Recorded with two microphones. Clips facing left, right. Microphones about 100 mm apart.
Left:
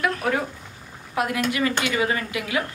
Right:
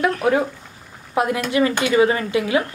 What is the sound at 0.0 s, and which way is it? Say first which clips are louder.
A woman's voice: right 6 dB; 20° right (ahead or behind).